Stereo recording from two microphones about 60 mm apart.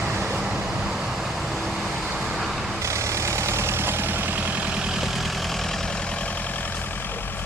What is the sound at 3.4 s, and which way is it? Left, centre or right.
Vehicle, right.